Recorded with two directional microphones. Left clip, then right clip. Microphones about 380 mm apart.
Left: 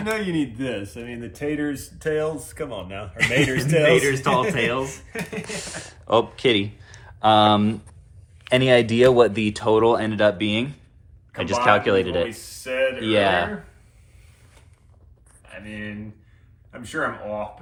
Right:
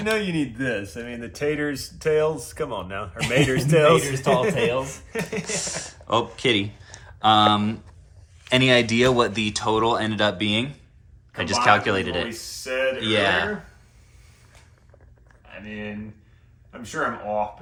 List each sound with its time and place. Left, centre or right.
0.3 s speech: right
2.6 s a man's voice: centre
15.6 s speech: centre